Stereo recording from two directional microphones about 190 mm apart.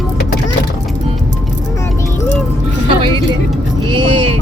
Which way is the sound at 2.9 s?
25° right (ahead or behind).